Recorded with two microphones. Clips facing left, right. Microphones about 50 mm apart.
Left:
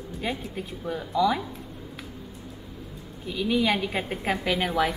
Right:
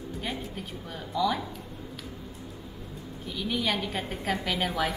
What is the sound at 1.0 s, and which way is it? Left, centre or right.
Speech, centre.